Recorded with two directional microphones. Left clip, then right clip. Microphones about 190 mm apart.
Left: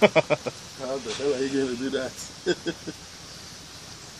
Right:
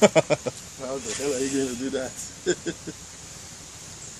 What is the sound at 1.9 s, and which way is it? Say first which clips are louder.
Speech: left 1 dB; 10° left (ahead or behind).